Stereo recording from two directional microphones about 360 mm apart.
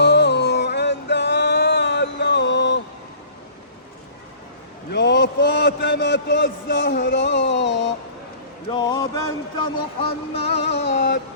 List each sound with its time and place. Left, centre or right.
0.0 s music: left
4.9 s a sound: left
8.7 s speech: centre
10.6 s music: left